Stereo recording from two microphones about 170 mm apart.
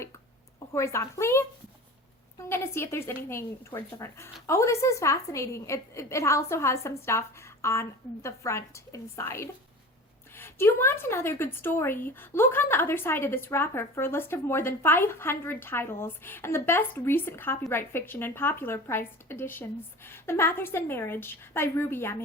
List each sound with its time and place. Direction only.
0.7 s a woman's voice: 15° left (ahead or behind)
2.5 s a woman's voice: 15° left (ahead or behind)